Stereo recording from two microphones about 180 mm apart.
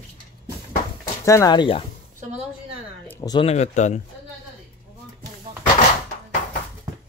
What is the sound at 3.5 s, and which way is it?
Speech, 40° left (ahead or behind).